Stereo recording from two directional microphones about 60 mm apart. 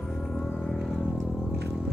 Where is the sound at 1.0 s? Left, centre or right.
Centre.